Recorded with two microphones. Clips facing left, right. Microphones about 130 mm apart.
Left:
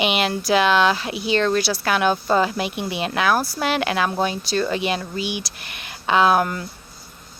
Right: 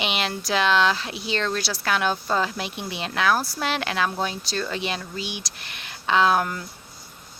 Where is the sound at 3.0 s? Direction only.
10° left (ahead or behind).